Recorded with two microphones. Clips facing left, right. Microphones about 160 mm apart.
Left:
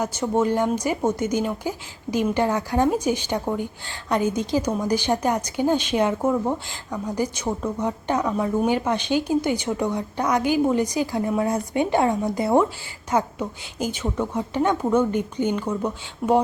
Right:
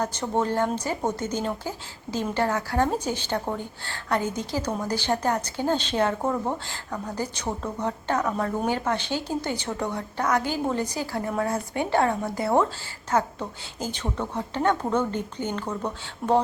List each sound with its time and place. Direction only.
0.0 s a woman's voice: 10° left (ahead or behind)